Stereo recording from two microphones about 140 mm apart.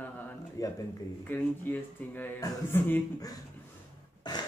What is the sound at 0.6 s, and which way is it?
Speech, 25° left (ahead or behind).